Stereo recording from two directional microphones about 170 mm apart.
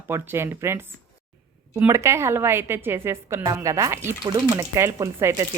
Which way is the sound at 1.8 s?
15° right (ahead or behind).